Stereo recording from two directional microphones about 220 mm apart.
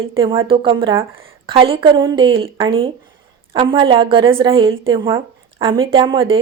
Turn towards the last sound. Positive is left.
turn(degrees=-25)  # may be behind; listen again after turning